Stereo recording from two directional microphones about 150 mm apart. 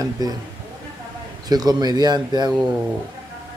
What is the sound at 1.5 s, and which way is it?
Speech, 25° right (ahead or behind).